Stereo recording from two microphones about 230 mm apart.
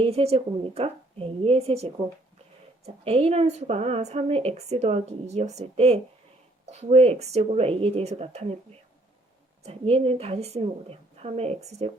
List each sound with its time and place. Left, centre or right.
0.0 s a woman's voice: right
9.6 s a woman's voice: right